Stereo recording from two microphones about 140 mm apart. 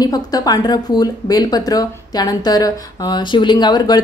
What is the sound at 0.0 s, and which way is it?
Speech, 25° left (ahead or behind).